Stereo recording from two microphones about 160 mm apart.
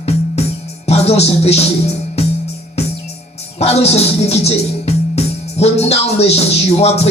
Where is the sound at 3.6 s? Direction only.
40° left (ahead or behind).